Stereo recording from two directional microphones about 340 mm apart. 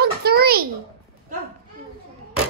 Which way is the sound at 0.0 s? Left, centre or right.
Right.